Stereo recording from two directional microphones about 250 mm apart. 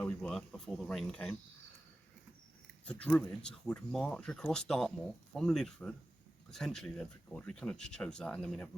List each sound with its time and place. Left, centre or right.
0.0 s speech: centre
2.8 s speech: centre